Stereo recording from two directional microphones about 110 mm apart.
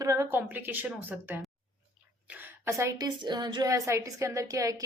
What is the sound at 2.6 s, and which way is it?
Speech, 25° right (ahead or behind).